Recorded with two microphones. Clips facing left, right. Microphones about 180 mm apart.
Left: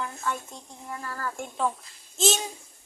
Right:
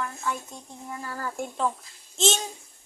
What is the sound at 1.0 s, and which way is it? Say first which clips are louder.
Speech: even; 15° right (ahead or behind).